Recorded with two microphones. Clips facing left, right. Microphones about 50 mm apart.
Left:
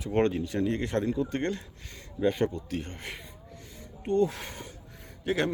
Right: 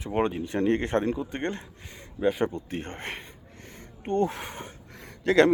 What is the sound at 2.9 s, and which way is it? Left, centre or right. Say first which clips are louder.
Speech: right 4 dB; right.